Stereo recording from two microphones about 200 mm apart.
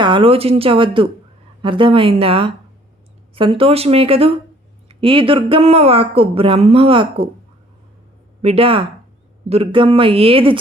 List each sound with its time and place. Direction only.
0.0 s a woman's voice: 25° right (ahead or behind)
8.4 s a woman's voice: 30° right (ahead or behind)